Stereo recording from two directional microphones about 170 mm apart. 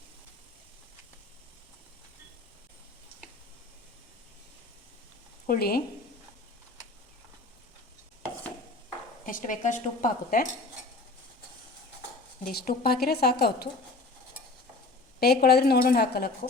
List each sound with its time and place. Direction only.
5.5 s speech: 65° left (ahead or behind)
9.2 s a woman's voice: 50° left (ahead or behind)
12.5 s speech: 65° left (ahead or behind)
15.2 s a woman's voice: 70° left (ahead or behind)